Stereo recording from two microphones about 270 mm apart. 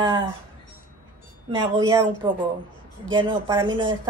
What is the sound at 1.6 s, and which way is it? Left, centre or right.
A woman's voice, centre.